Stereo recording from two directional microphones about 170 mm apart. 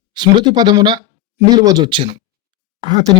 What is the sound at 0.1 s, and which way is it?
A man's voice, 25° right (ahead or behind).